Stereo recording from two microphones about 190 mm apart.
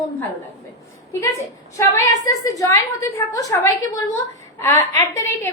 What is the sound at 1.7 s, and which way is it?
A woman's voice, 15° left (ahead or behind).